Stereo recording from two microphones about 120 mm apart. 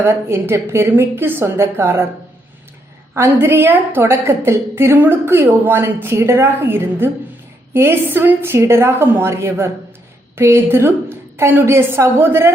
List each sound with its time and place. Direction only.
0.0 s a woman's voice: 20° right (ahead or behind)
3.4 s a woman's voice: 20° right (ahead or behind)